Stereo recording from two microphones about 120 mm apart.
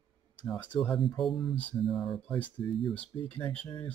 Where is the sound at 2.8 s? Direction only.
10° left (ahead or behind).